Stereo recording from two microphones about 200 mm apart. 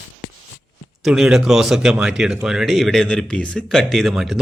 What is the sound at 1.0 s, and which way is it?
Speech, centre (ahead or behind).